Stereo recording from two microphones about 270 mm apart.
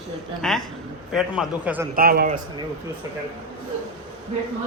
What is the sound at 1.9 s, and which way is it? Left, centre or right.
Speech, right.